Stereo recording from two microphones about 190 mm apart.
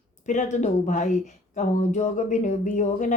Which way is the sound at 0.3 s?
40° left (ahead or behind).